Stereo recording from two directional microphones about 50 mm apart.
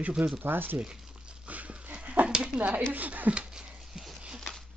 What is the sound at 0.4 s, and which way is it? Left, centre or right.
Speech, right.